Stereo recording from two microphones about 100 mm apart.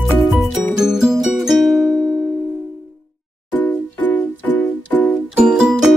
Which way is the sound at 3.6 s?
15° left (ahead or behind).